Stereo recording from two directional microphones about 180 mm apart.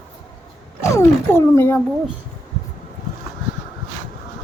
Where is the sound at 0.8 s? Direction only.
15° left (ahead or behind).